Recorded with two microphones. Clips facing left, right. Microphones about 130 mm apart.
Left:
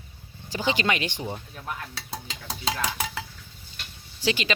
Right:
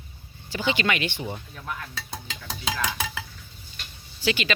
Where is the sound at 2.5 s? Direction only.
30° left (ahead or behind).